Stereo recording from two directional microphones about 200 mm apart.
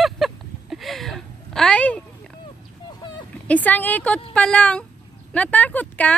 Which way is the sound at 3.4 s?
10° left (ahead or behind).